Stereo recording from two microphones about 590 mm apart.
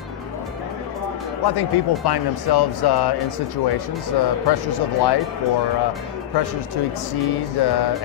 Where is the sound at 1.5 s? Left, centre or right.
Left.